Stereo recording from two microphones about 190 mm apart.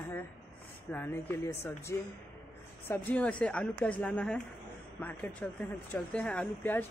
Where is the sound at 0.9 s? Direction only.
10° left (ahead or behind).